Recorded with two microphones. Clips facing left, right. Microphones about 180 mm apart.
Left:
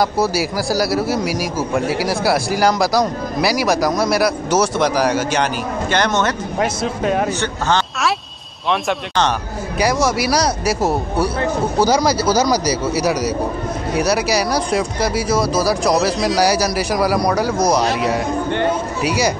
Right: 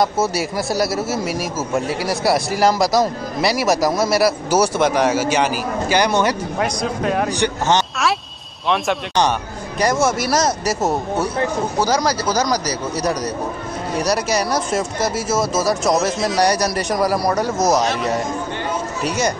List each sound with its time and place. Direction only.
0.0 s a man's voice: centre (ahead or behind)
6.6 s a man's voice: centre (ahead or behind)
7.3 s a man's voice: 15° right (ahead or behind)
10.2 s a man's voice: centre (ahead or behind)